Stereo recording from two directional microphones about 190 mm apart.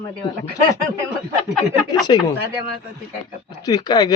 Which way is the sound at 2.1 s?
25° left (ahead or behind).